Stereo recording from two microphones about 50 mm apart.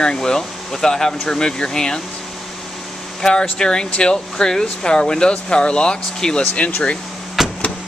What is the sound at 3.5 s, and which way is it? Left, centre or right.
Speech, centre.